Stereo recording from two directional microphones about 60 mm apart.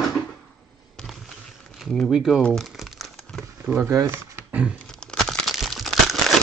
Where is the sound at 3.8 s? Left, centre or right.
Right.